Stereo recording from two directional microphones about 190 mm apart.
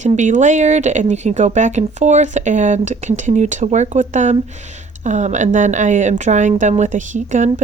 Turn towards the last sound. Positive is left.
turn(degrees=-40)  # may be behind; listen again after turning